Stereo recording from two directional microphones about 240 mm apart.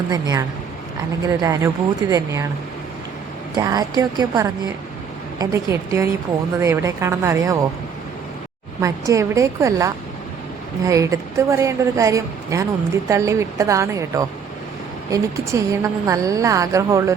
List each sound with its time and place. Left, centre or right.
0.1 s a woman's voice: centre
3.6 s a woman's voice: centre
8.8 s a woman's voice: centre